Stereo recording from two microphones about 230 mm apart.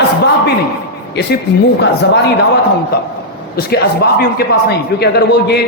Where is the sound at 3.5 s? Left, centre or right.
Left.